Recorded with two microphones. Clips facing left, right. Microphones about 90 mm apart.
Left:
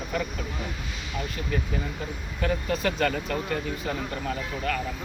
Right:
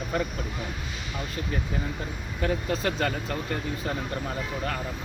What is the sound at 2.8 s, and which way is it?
Speech, 30° right (ahead or behind).